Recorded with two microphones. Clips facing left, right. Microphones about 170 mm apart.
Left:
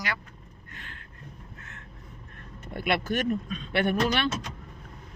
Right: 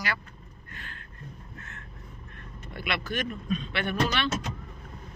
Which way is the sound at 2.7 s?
50° left (ahead or behind).